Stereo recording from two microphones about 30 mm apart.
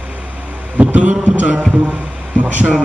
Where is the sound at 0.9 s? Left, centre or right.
Right.